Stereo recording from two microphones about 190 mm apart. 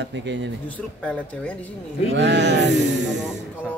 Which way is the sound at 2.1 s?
65° right (ahead or behind).